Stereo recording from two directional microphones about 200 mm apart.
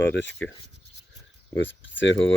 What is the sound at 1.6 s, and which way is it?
Speech, 65° left (ahead or behind).